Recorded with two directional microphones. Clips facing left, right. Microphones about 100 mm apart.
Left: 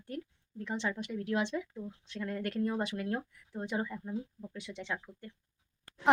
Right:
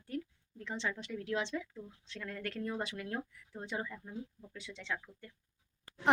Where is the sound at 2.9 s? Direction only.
30° left (ahead or behind).